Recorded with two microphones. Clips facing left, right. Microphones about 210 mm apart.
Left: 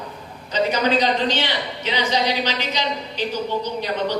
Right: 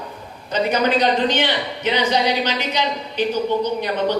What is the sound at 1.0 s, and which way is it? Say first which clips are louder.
A woman's voice: right 2 dB; 55° right (ahead or behind).